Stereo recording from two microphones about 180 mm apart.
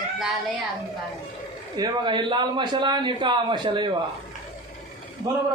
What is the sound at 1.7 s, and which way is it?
A man's voice, 25° right (ahead or behind).